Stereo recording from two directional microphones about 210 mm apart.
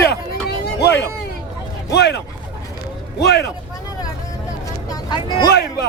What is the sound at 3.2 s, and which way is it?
Speech, 50° left (ahead or behind).